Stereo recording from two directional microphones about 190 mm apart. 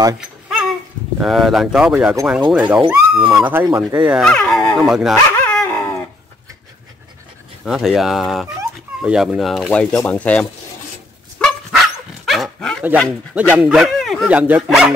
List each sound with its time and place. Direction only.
1.2 s speech: centre (ahead or behind); by 4.1 s 15° right (ahead or behind)
4.1 s speech: 5° left (ahead or behind)
5.1 s dog: 15° left (ahead or behind)
7.6 s speech: centre (ahead or behind)
11.3 s dog: centre (ahead or behind)
13.3 s speech: 10° right (ahead or behind)